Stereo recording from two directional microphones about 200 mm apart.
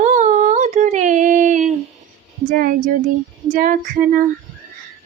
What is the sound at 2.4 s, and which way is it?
Female singing, 45° right (ahead or behind).